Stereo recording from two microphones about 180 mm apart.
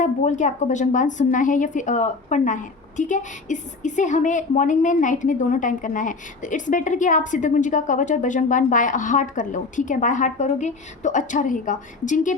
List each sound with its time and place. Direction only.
0.0 s a woman's voice: 45° left (ahead or behind)